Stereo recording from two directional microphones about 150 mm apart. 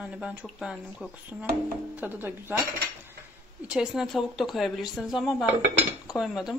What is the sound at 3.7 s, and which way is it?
Speech, 5° right (ahead or behind).